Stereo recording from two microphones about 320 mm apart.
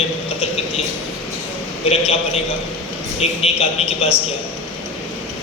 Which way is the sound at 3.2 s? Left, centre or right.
Centre.